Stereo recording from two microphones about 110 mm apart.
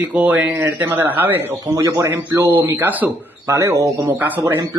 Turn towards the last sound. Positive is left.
turn(degrees=-30)  # may be behind; listen again after turning